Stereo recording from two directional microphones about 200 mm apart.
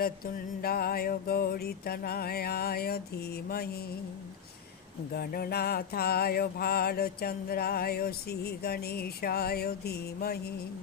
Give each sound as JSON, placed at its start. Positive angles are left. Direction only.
{"t": 0.6, "sound": "mantra", "side_deg": 50}
{"t": 5.1, "sound": "mantra", "side_deg": 50}